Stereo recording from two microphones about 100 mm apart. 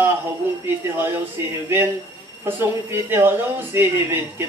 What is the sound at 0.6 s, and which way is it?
Speech, 20° right (ahead or behind).